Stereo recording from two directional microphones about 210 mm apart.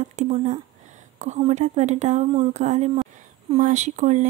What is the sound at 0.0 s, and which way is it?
Speech, 35° right (ahead or behind).